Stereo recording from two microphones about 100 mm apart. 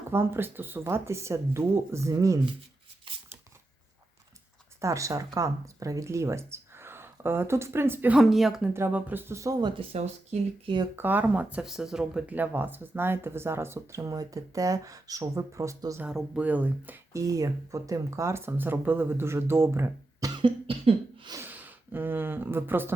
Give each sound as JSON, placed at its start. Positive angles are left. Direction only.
{"t": 0.1, "sound": "speech", "side_deg": -25}
{"t": 3.1, "sound": "a sound", "side_deg": -60}
{"t": 4.8, "sound": "speech", "side_deg": -30}
{"t": 8.1, "sound": "a woman's voice", "side_deg": 0}
{"t": 8.9, "sound": "speech", "side_deg": -15}
{"t": 9.6, "sound": "speech", "side_deg": -45}
{"t": 10.9, "sound": "speech", "side_deg": -20}
{"t": 16.0, "sound": "speech", "side_deg": -10}
{"t": 17.1, "sound": "speech", "side_deg": -35}
{"t": 20.3, "sound": "cough", "side_deg": -60}
{"t": 21.4, "sound": "speech", "side_deg": -20}